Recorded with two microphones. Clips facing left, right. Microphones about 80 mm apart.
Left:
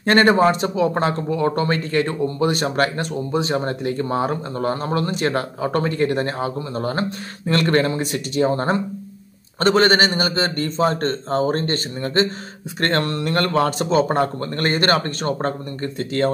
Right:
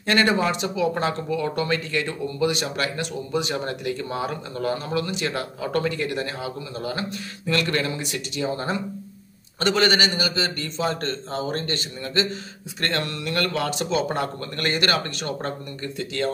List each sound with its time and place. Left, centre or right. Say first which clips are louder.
0.0 s speech: left 6 dB; left